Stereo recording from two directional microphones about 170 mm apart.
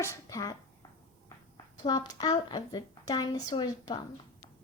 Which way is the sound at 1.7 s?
25° left (ahead or behind).